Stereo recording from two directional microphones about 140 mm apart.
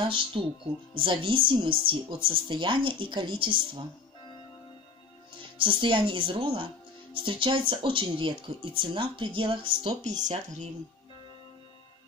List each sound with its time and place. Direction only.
0.0 s speech: 35° right (ahead or behind)
5.4 s speech: 35° right (ahead or behind)
10.0 s speech: 60° right (ahead or behind)